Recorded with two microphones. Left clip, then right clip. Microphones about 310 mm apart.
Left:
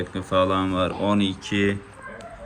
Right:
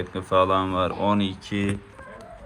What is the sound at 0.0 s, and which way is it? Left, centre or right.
Speech, centre.